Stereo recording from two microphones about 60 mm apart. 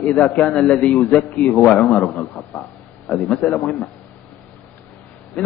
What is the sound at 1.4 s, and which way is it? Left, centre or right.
A man's voice, left.